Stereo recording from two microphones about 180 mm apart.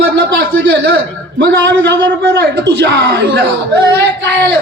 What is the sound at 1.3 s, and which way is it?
A woman's voice, 80° right.